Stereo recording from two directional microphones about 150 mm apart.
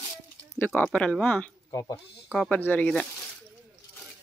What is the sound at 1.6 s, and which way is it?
Speech, 25° left (ahead or behind).